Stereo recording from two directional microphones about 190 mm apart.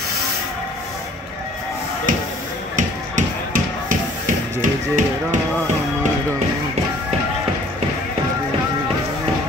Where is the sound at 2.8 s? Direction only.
45° right (ahead or behind).